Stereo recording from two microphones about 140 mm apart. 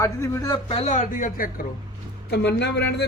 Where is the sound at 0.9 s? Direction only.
65° left (ahead or behind).